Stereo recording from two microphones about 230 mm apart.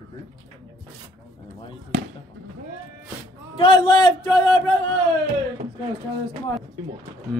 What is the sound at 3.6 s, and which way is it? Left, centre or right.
Speech, left.